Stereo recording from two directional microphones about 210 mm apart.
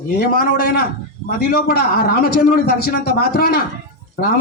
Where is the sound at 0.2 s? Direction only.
45° left (ahead or behind).